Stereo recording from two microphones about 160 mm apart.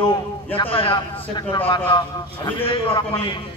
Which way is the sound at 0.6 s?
35° left (ahead or behind).